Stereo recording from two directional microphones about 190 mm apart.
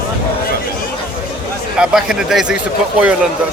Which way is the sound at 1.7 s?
5° right (ahead or behind).